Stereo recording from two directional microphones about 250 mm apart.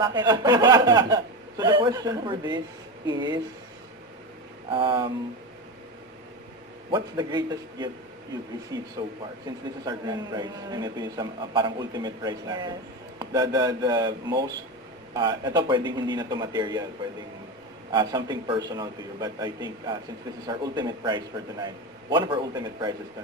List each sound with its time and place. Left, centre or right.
0.0 s a man's voice: centre
4.7 s speech: centre
6.9 s a man's voice: centre
17.9 s a man's voice: centre